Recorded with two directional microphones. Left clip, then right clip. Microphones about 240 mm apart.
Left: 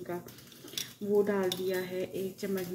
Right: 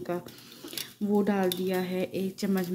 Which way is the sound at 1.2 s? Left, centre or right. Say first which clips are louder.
Right 3 dB; right.